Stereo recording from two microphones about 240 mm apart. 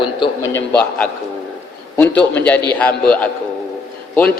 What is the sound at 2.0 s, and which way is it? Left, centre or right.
Speech, centre.